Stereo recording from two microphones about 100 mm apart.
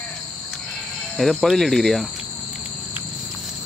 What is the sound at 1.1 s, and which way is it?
Speech, centre (ahead or behind).